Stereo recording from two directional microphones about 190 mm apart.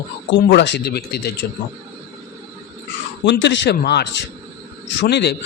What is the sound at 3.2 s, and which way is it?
A man's voice, 65° left (ahead or behind).